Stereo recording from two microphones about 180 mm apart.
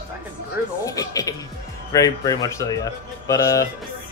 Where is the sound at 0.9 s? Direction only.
20° left (ahead or behind).